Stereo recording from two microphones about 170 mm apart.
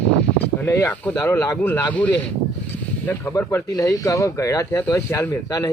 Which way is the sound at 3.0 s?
15° left (ahead or behind).